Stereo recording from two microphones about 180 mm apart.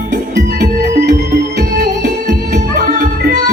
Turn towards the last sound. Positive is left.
turn(degrees=-55)  # may be behind; listen again after turning